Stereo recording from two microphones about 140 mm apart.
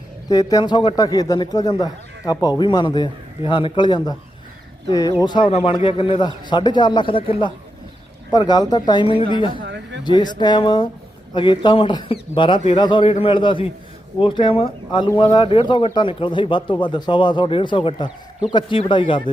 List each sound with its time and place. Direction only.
0.3 s a man's voice: 25° left (ahead or behind)
5.5 s speech: 50° left (ahead or behind)
5.8 s speech: 40° left (ahead or behind)
8.3 s speech: 30° left (ahead or behind)